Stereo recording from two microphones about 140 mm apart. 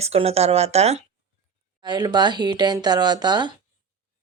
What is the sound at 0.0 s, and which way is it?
Speech, 45° right (ahead or behind).